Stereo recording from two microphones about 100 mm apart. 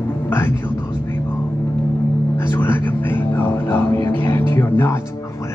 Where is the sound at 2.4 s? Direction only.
25° left (ahead or behind).